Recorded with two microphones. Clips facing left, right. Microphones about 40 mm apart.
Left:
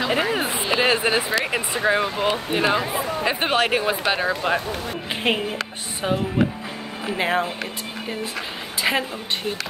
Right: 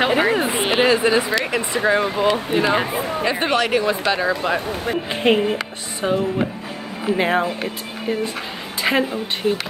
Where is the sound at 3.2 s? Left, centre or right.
Left; by 5.4 s centre.